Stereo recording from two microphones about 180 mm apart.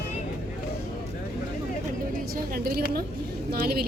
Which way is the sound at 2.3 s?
55° right (ahead or behind).